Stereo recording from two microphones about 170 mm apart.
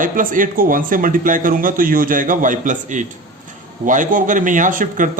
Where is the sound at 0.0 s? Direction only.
50° right (ahead or behind).